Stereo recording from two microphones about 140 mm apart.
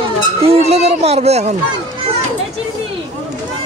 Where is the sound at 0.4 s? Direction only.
45° right (ahead or behind).